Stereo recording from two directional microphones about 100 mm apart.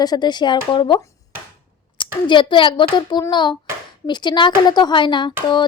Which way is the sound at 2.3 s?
55° left (ahead or behind).